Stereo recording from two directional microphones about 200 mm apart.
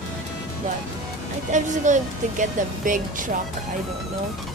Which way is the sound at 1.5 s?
40° right (ahead or behind).